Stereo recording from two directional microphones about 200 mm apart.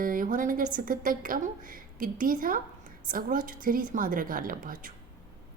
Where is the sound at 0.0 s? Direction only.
45° right (ahead or behind).